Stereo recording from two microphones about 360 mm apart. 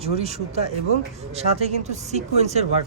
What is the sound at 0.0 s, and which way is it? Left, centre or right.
Speech, centre.